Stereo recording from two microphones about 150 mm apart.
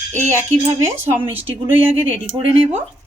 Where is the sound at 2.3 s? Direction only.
40° right (ahead or behind).